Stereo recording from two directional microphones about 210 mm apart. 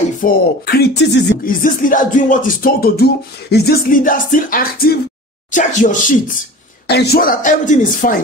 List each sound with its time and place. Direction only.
0.2 s a sound: 50° left (ahead or behind)
5.5 s a woman's voice: 35° left (ahead or behind)
6.9 s a woman's voice: 50° left (ahead or behind)